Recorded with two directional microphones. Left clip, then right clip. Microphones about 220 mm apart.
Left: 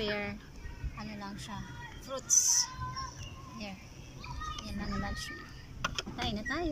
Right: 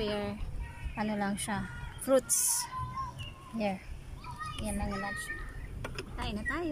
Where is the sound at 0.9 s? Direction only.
40° right (ahead or behind).